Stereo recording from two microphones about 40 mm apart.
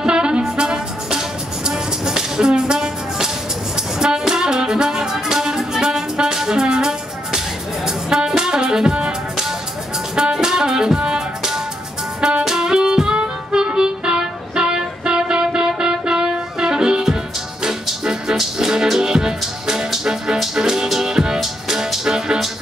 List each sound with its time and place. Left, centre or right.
0.0 s music: right
10.1 s music: centre